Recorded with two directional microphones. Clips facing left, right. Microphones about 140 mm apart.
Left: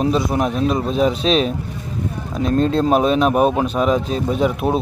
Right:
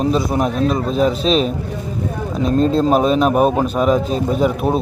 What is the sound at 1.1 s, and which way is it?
Speech, 40° right (ahead or behind).